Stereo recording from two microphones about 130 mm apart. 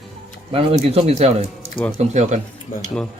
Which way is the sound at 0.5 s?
45° right (ahead or behind).